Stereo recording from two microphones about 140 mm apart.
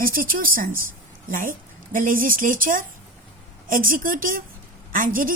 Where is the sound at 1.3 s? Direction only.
75° right (ahead or behind).